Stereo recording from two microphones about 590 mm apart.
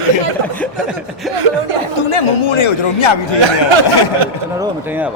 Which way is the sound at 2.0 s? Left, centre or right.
Left.